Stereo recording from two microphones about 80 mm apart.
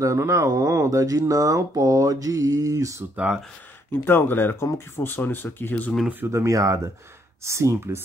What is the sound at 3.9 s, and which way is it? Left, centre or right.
Speech, left.